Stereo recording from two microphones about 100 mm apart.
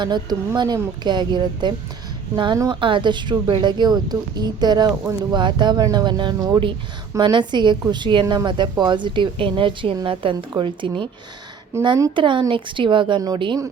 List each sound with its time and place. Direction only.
0.0 s speech: 45° right (ahead or behind)
11.7 s speech: 25° right (ahead or behind)
12.1 s speech: 55° right (ahead or behind)